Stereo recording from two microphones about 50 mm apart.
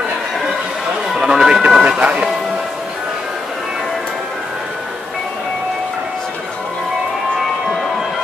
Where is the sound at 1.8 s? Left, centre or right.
Right.